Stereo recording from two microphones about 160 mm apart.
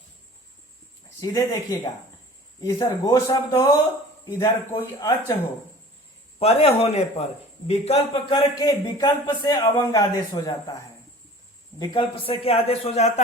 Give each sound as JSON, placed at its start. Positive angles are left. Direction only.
{"t": 1.2, "sound": "a man's voice", "side_deg": 20}
{"t": 6.4, "sound": "a man's voice", "side_deg": 40}
{"t": 8.6, "sound": "a man's voice", "side_deg": 25}
{"t": 11.8, "sound": "a man's voice", "side_deg": 35}